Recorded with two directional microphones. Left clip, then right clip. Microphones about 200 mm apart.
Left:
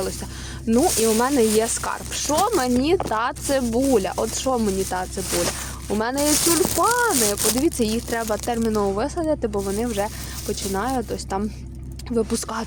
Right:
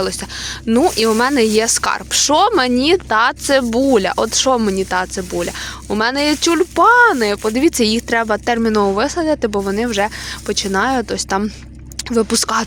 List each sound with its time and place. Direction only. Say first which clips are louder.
0.7 s speech: right 5 dB; 15° right (ahead or behind)
6.7 s speech: right 13 dB; 20° right (ahead or behind)